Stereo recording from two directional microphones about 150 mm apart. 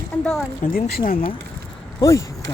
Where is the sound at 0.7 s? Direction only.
75° left (ahead or behind).